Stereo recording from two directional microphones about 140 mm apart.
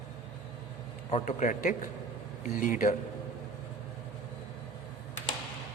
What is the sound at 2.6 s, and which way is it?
Speech, 70° left (ahead or behind).